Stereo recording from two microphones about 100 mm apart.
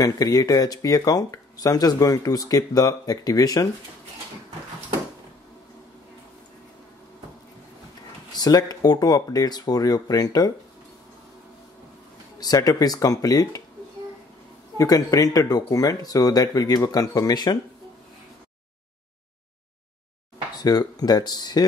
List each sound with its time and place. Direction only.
0.0 s speech: 40° left (ahead or behind)
8.4 s speech: 40° left (ahead or behind)
12.4 s speech: 40° left (ahead or behind)
14.8 s speech: 35° left (ahead or behind)
20.5 s speech: 40° left (ahead or behind)